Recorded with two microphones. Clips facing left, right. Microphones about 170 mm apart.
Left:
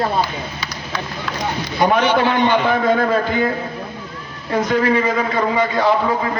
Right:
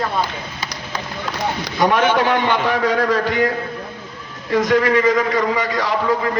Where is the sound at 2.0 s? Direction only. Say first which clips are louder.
Left 1 dB; 50° right (ahead or behind).